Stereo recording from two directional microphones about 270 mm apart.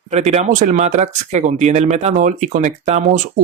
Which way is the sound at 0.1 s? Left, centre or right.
Right.